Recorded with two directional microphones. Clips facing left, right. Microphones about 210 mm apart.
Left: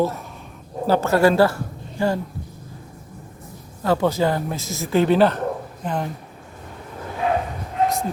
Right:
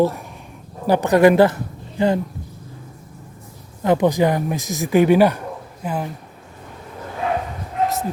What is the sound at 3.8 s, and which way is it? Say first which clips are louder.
Speech: right 3 dB; 20° right (ahead or behind).